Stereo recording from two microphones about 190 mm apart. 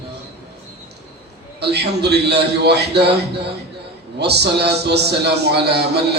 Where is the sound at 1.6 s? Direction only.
60° right (ahead or behind).